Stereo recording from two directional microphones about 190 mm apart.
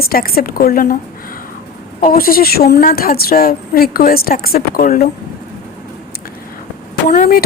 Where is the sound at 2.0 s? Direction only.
50° left (ahead or behind).